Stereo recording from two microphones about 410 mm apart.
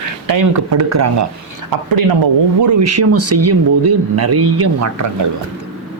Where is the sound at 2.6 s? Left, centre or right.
Right.